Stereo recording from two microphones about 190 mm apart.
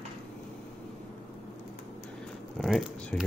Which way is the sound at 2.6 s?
Centre (ahead or behind).